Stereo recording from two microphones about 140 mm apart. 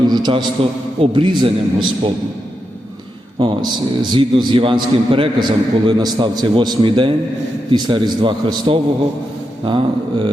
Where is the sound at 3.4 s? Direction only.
30° right (ahead or behind).